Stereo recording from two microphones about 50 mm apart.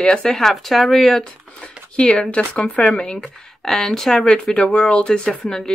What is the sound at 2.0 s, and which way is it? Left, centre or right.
Speech, centre.